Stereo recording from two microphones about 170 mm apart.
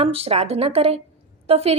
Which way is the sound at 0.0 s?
35° right (ahead or behind).